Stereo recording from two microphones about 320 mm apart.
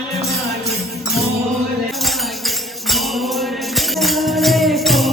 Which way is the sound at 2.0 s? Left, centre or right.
Centre.